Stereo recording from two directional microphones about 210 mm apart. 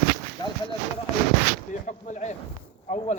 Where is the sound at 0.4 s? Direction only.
20° left (ahead or behind).